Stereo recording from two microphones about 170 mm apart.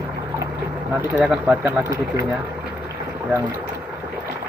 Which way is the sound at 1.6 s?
15° right (ahead or behind).